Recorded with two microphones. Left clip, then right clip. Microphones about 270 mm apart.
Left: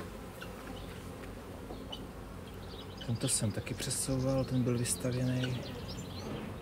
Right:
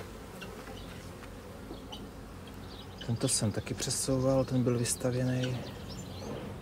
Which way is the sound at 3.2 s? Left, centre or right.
Right.